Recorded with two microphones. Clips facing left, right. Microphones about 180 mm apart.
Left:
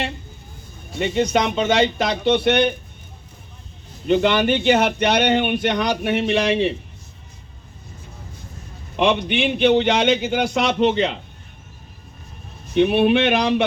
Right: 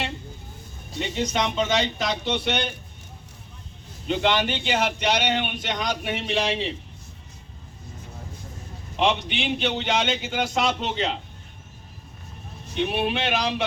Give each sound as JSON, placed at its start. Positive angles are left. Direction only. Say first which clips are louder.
{"t": 0.9, "sound": "a man's voice", "louder": "left 7 dB", "side_deg": 60}
{"t": 4.1, "sound": "a man's voice", "louder": "left 6 dB", "side_deg": 55}
{"t": 9.0, "sound": "a man's voice", "louder": "left 5 dB", "side_deg": 60}
{"t": 12.7, "sound": "a man's voice", "louder": "left 9 dB", "side_deg": 55}